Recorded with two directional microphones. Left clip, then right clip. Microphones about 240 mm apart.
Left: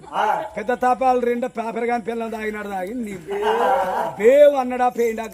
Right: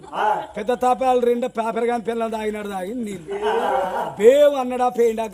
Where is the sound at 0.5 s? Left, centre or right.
Right.